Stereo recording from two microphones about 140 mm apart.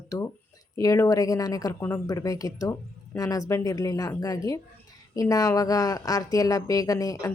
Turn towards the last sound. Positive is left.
turn(degrees=25)  # may be behind; listen again after turning